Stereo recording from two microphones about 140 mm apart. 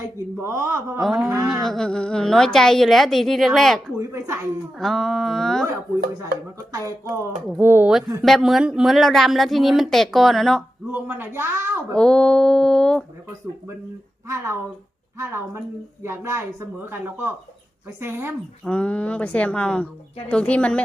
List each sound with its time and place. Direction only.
0.0 s speech: 20° right (ahead or behind)
1.0 s speech: 5° right (ahead or behind)
3.9 s speech: 20° right (ahead or behind)
4.8 s speech: centre (ahead or behind)
6.7 s speech: 20° right (ahead or behind)
8.2 s speech: centre (ahead or behind)
10.9 s speech: 15° right (ahead or behind)
11.9 s speech: 5° left (ahead or behind)
14.3 s speech: 20° right (ahead or behind)
18.6 s speech: 10° left (ahead or behind)